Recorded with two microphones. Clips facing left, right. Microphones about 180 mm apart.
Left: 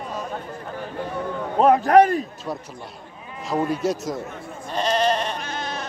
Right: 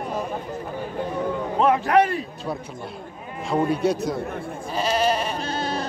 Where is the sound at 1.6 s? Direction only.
40° left (ahead or behind).